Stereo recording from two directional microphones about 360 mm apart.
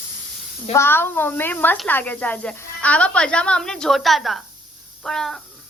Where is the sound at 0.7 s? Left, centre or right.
Centre.